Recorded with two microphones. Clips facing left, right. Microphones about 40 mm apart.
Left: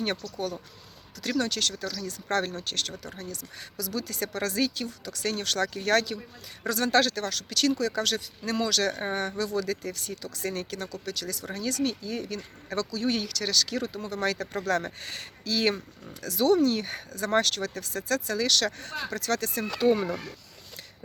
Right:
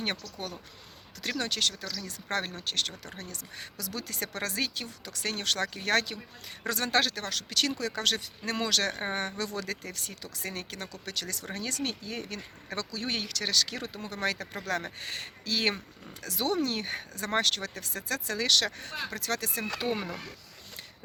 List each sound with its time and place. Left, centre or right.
1.4 s speech: right
3.0 s speech: right
6.9 s speech: centre
9.4 s speech: right
11.0 s speech: right; by 20.1 s centre